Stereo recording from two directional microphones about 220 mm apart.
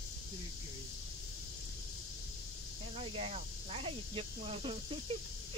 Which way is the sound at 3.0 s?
30° right (ahead or behind).